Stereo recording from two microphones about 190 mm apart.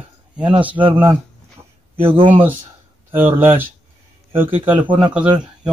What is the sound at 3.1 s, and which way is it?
Speech, 10° right (ahead or behind).